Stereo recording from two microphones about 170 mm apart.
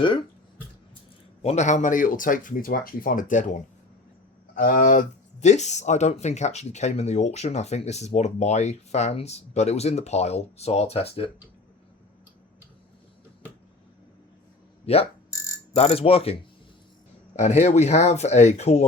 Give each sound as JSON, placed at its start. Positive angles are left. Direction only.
{"t": 1.4, "sound": "speech", "side_deg": 40}
{"t": 14.9, "sound": "speech", "side_deg": 35}